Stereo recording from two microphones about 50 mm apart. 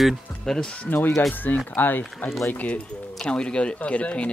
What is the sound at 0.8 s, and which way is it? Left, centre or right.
Speech, left.